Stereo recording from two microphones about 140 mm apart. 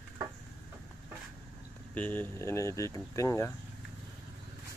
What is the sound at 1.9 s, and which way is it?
Speech, 10° left (ahead or behind).